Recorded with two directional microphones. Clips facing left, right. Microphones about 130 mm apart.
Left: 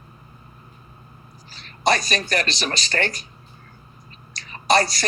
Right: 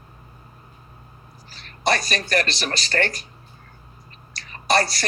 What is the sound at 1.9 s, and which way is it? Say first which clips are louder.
Speech: right 1 dB; 20° left (ahead or behind).